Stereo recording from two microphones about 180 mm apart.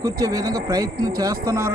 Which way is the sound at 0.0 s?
20° right (ahead or behind).